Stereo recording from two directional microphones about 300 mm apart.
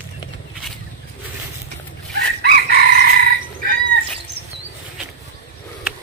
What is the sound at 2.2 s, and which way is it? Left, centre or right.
Chicken, right.